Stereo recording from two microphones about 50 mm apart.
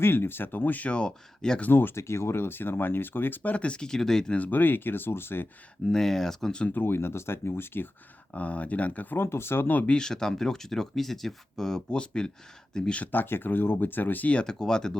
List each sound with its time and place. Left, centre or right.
0.0 s speech: left
0.9 s speech: centre
1.7 s speech: left
2.0 s speech: left
3.5 s speech: left
4.4 s speech: left
5.9 s speech: centre
6.7 s speech: left
8.3 s speech: left
9.1 s speech: left
9.8 s speech: centre
13.0 s speech: left
14.4 s speech: centre